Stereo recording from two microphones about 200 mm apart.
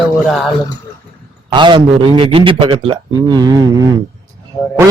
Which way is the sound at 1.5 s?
25° right (ahead or behind).